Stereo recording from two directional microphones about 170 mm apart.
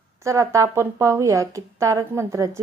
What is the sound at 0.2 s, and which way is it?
Speech, 15° right (ahead or behind).